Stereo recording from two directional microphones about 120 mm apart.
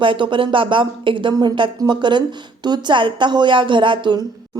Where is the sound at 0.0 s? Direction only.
45° right (ahead or behind).